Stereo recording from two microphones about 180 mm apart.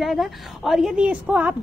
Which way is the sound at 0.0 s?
Centre (ahead or behind).